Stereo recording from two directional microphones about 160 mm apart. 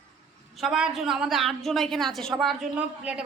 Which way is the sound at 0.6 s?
5° right (ahead or behind).